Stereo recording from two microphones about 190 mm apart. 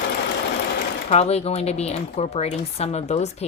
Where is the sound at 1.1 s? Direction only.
35° left (ahead or behind).